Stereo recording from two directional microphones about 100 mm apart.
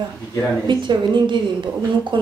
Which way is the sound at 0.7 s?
50° right (ahead or behind).